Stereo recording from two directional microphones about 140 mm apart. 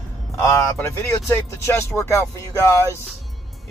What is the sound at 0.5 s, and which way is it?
Speech, 20° left (ahead or behind).